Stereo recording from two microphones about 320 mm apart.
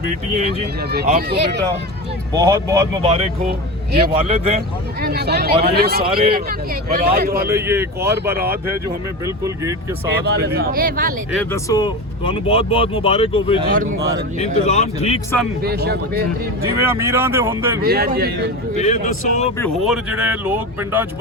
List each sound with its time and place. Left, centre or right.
0.9 s a man's voice: right
2.3 s a man's voice: centre
4.9 s a man's voice: right
7.5 s speech: centre
8.0 s a man's voice: right
9.2 s speech: centre
10.2 s a man's voice: right
11.5 s speech: centre
15.6 s a man's voice: right
16.8 s speech: centre
17.8 s a man's voice: right
18.8 s speech: left
19.5 s speech: centre